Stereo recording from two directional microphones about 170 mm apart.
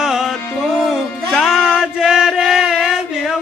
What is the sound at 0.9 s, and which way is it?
Music, centre (ahead or behind).